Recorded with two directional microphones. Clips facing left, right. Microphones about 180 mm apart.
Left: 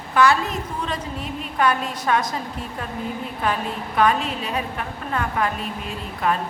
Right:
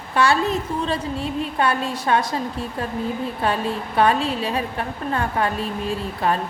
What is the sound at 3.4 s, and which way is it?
A woman's voice, 30° right (ahead or behind).